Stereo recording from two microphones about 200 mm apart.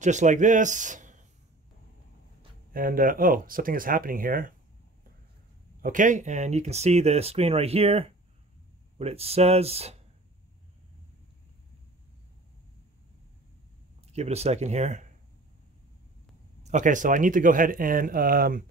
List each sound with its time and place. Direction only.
0.0 s a man's voice: 35° right (ahead or behind)
2.7 s speech: 45° right (ahead or behind)
5.8 s speech: 40° right (ahead or behind)
14.0 s speech: 30° right (ahead or behind)
16.6 s speech: 40° right (ahead or behind)